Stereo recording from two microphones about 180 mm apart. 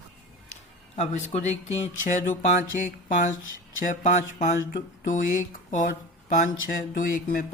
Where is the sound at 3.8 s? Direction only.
45° left (ahead or behind).